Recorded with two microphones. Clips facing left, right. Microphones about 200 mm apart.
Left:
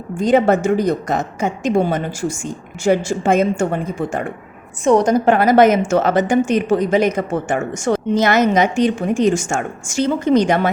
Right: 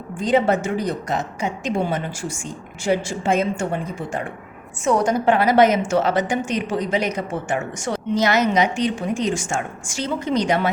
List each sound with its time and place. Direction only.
0.3 s a woman's voice: 45° left (ahead or behind)